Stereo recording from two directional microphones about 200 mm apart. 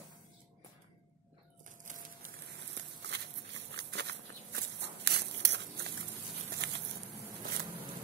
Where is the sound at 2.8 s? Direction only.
65° right (ahead or behind).